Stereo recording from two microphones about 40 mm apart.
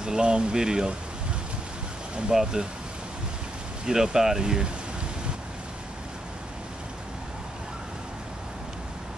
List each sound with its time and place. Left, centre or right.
0.0 s speech: right
2.3 s speech: centre
3.8 s speech: centre